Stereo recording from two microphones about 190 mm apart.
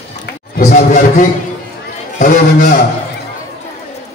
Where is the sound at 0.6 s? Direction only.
40° left (ahead or behind).